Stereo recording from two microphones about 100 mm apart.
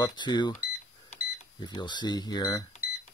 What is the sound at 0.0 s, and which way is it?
Speech, 45° left (ahead or behind).